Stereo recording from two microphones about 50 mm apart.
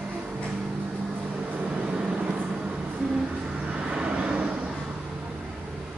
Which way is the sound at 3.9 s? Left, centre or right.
Right.